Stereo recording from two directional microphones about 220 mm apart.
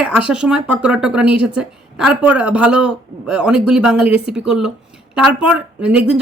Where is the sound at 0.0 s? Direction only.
5° right (ahead or behind).